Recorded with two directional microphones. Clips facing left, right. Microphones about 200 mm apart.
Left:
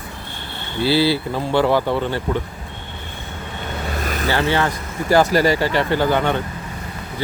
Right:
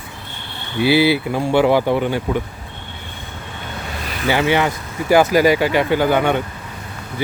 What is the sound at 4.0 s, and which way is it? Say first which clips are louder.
Vehicle: left 5 dB; 45° left (ahead or behind).